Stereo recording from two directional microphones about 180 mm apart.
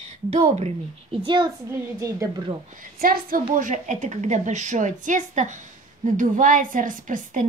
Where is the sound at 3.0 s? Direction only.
55° right (ahead or behind).